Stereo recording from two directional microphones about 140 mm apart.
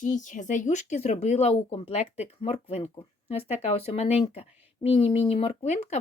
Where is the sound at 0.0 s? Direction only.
65° left (ahead or behind).